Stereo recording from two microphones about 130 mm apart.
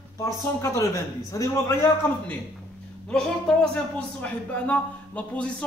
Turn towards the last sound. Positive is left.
turn(degrees=10)  # may be behind; listen again after turning